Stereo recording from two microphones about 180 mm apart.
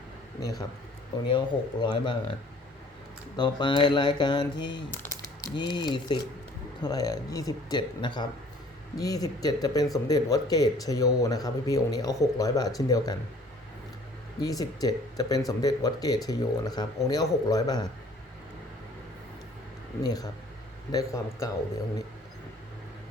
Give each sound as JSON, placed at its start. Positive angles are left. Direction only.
{"t": 1.3, "sound": "speech", "side_deg": 25}
{"t": 3.3, "sound": "speech", "side_deg": 25}
{"t": 14.4, "sound": "speech", "side_deg": 20}
{"t": 20.0, "sound": "speech", "side_deg": 20}